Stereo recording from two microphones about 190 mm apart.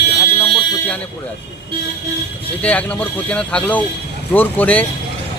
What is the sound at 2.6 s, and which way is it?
Speech, 5° left (ahead or behind).